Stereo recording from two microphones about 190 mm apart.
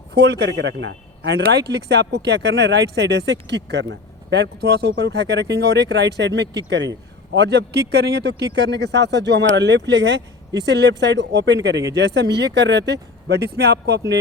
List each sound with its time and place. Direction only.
0.1 s speech: 60° right (ahead or behind)